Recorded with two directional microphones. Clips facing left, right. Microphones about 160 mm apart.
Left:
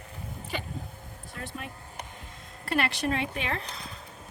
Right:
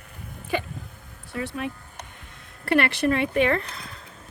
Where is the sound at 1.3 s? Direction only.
70° right (ahead or behind).